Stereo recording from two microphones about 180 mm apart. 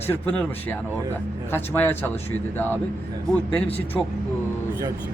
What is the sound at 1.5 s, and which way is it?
Speech, 10° left (ahead or behind).